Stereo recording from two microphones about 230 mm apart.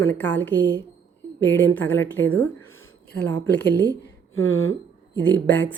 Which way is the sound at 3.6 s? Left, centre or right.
Left.